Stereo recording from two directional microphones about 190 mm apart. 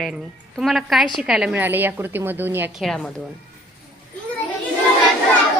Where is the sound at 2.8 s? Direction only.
Centre (ahead or behind).